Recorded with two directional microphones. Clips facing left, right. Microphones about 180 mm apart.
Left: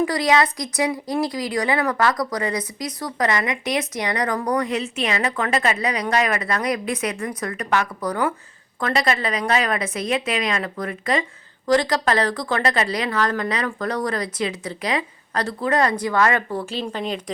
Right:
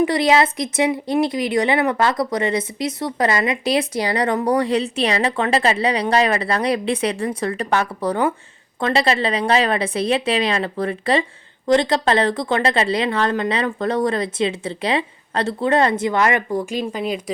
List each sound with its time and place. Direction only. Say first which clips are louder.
0.0 s a woman's voice: right 3 dB; 25° right (ahead or behind); by 17.3 s 10° right (ahead or behind)